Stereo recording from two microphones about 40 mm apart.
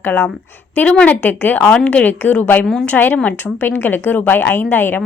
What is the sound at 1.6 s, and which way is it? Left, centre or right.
Speech, left.